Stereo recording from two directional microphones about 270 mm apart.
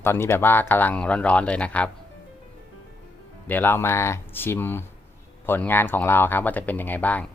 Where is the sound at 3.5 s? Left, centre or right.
Centre.